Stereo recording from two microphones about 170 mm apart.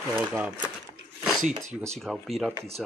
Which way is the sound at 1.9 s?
Centre (ahead or behind).